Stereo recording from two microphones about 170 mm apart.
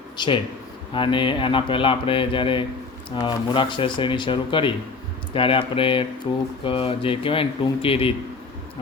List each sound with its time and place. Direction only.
0.2 s speech: 25° left (ahead or behind)